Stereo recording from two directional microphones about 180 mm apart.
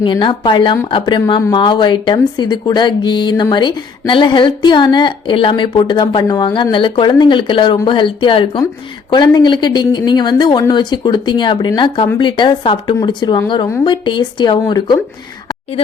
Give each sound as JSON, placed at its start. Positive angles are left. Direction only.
{"t": 0.0, "sound": "speech", "side_deg": 25}